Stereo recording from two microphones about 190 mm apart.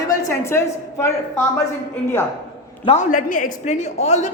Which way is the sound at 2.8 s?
35° left (ahead or behind).